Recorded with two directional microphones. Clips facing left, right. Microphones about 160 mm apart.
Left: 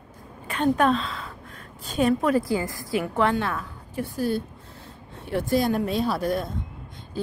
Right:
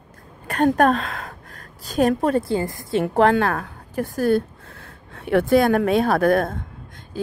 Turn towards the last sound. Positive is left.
turn(degrees=-55)  # may be behind; listen again after turning